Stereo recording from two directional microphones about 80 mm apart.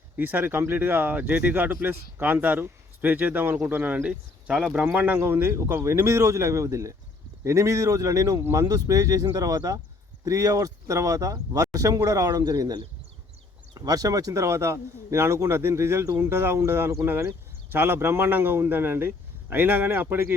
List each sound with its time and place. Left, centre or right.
0.2 s speech: right
1.7 s a man's voice: right